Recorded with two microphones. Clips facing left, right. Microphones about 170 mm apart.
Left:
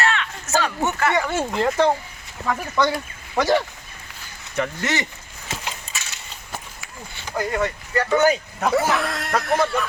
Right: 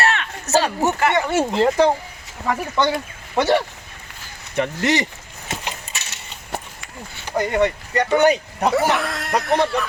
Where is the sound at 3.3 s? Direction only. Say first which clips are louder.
Right 2 dB; 25° right (ahead or behind).